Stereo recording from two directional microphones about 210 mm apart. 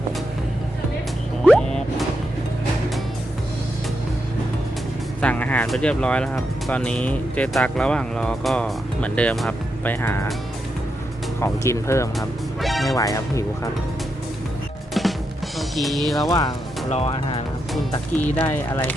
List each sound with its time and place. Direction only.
1.5 s music: 5° left (ahead or behind)
5.2 s speech: 5° left (ahead or behind)
11.3 s speech: 15° left (ahead or behind)
12.6 s speech: centre (ahead or behind)
13.0 s speech: 15° left (ahead or behind)
15.0 s music: centre (ahead or behind)
15.5 s speech: centre (ahead or behind)
16.2 s speech: 20° left (ahead or behind)
18.3 s speech: 10° left (ahead or behind)